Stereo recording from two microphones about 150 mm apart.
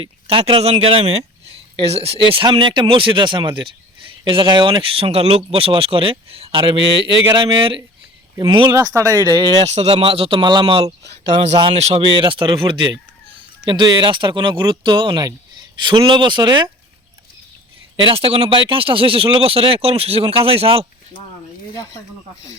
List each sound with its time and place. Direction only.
0.0 s speech: 35° right (ahead or behind)
9.6 s a man's voice: 45° right (ahead or behind)
12.1 s speech: 35° right (ahead or behind)
17.9 s speech: 35° right (ahead or behind)